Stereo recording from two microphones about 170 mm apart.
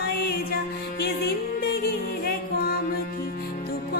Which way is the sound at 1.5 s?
60° left (ahead or behind).